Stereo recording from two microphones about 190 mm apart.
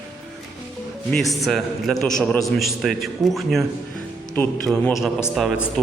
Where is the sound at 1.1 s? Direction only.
Centre (ahead or behind).